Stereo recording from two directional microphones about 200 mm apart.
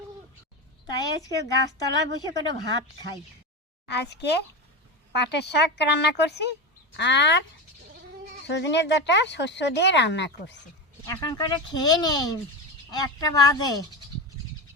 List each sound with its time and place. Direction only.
0.9 s a woman's voice: 20° left (ahead or behind)
3.8 s speech: 55° left (ahead or behind)
8.4 s speech: 60° left (ahead or behind)
11.0 s speech: 20° left (ahead or behind)